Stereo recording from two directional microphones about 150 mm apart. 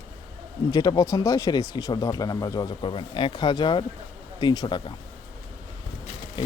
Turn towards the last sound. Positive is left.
turn(degrees=35)  # may be behind; listen again after turning